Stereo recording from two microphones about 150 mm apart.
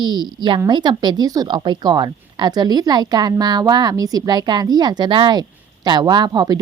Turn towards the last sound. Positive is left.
turn(degrees=-25)  # may be behind; listen again after turning